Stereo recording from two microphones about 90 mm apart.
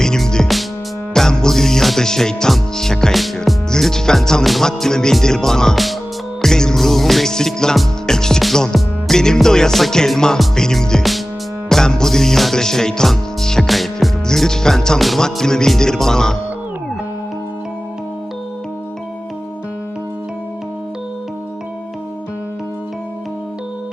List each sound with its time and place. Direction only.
0.0 s music: 5° left (ahead or behind)